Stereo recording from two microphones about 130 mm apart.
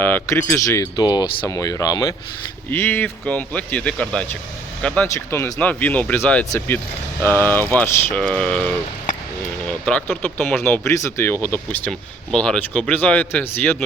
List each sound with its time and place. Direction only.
0.0 s speech: 15° left (ahead or behind)
2.6 s speech: 15° left (ahead or behind)
5.0 s speech: 20° left (ahead or behind)
5.5 s speech: 10° left (ahead or behind)
9.8 s speech: 10° left (ahead or behind)